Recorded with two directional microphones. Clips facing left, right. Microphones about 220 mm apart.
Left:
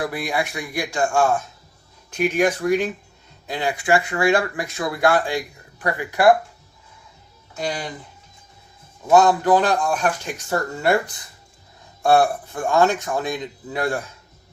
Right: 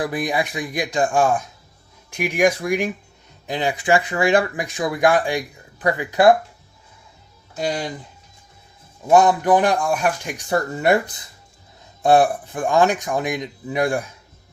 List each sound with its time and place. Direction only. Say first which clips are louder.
0.0 s speech: right 2 dB; 20° right (ahead or behind)
9.0 s speech: even; 15° right (ahead or behind)